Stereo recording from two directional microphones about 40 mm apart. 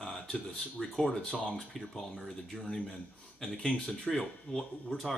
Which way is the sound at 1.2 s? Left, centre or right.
Left.